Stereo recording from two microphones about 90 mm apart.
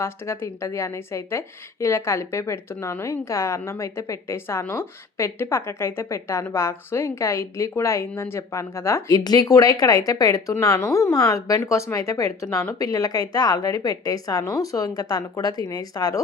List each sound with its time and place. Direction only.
0.0 s a woman's voice: 30° left (ahead or behind)
9.0 s a woman's voice: 50° left (ahead or behind)